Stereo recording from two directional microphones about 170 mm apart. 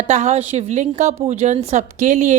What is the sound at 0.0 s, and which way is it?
A woman's voice, 40° right (ahead or behind).